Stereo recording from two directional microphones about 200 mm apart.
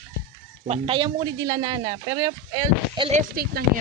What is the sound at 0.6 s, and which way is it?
A man's voice, 30° right (ahead or behind).